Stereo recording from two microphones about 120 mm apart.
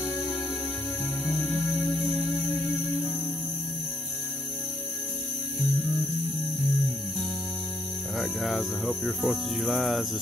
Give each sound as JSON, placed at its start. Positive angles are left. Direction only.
{"t": 1.5, "sound": "music", "side_deg": 15}
{"t": 8.2, "sound": "speech", "side_deg": 0}